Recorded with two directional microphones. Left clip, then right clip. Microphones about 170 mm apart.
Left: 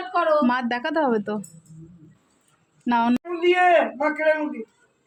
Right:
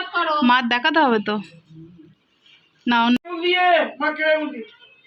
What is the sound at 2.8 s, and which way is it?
Speech, 5° left (ahead or behind).